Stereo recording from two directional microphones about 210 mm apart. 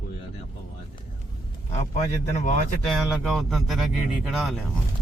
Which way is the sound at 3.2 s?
Centre (ahead or behind).